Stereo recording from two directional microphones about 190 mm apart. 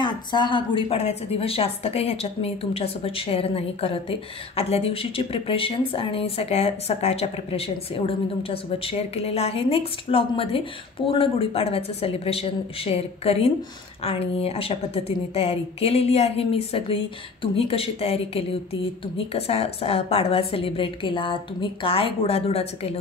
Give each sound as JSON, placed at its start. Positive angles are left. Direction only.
{"t": 0.0, "sound": "a woman's voice", "side_deg": 25}